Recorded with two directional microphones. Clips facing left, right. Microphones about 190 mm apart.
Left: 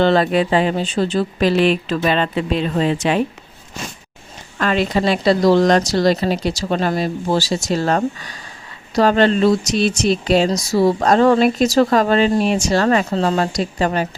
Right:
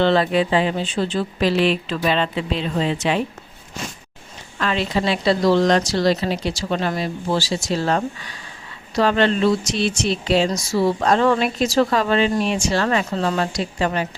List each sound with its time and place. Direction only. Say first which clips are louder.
0.0 s speech: left 2 dB; 45° left (ahead or behind)
4.6 s speech: left 4 dB; 50° left (ahead or behind)